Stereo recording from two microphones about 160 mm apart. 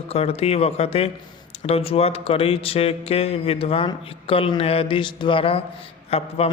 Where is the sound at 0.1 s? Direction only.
40° left (ahead or behind).